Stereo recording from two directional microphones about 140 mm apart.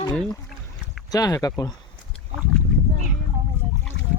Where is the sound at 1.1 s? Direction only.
25° left (ahead or behind).